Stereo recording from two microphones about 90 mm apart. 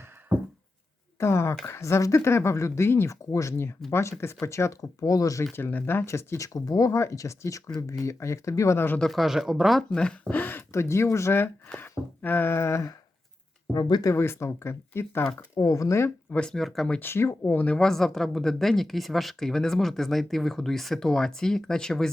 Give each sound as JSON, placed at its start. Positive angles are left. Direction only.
{"t": 1.2, "sound": "speech", "side_deg": 30}
{"t": 9.0, "sound": "speech", "side_deg": 0}
{"t": 10.7, "sound": "speech", "side_deg": 30}
{"t": 13.7, "sound": "speech", "side_deg": 55}
{"t": 14.0, "sound": "speech", "side_deg": 30}
{"t": 16.3, "sound": "speech", "side_deg": 10}
{"t": 17.0, "sound": "speech", "side_deg": 25}
{"t": 17.7, "sound": "speech", "side_deg": 5}